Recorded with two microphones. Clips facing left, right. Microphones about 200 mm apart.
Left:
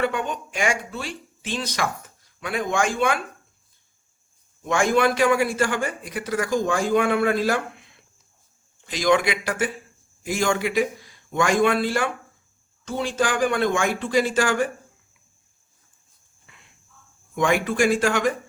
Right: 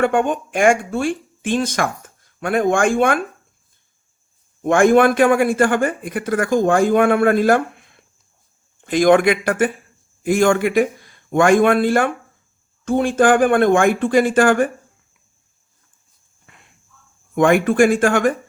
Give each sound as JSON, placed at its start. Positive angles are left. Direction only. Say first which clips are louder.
{"t": 0.0, "sound": "a man's voice", "louder": "right 8 dB", "side_deg": -50}
{"t": 4.6, "sound": "a man's voice", "louder": "right 8 dB", "side_deg": -55}
{"t": 17.3, "sound": "a man's voice", "louder": "right 8 dB", "side_deg": -55}